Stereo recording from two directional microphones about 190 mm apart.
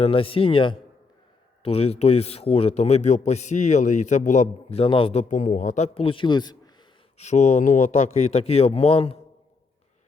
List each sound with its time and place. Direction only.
0.0 s a man's voice: 30° left (ahead or behind)
5.3 s speech: 40° left (ahead or behind); by 6.6 s 20° left (ahead or behind)
7.2 s a man's voice: 35° left (ahead or behind)